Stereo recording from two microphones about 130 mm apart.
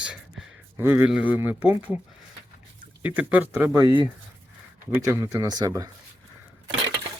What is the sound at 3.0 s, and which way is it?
Speech, 10° right (ahead or behind).